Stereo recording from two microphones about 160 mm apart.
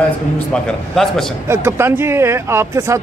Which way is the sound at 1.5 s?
15° right (ahead or behind).